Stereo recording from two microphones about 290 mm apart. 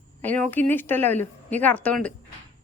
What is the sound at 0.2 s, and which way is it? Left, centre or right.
A woman's voice, centre.